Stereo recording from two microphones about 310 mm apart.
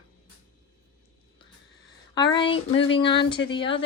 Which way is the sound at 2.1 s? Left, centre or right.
Centre.